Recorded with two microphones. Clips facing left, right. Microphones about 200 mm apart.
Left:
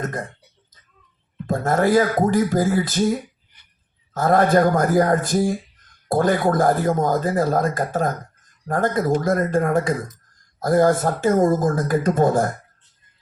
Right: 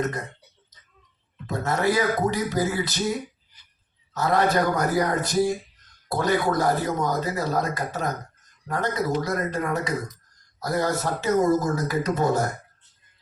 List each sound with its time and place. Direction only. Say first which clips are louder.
0.0 s speech: even; 50° left (ahead or behind)
1.5 s speech: left 5 dB; 50° left (ahead or behind)